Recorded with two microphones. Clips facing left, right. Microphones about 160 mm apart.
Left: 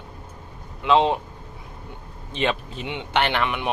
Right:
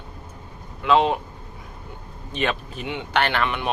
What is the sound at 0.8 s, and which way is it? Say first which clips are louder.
Speech: even; 25° left (ahead or behind).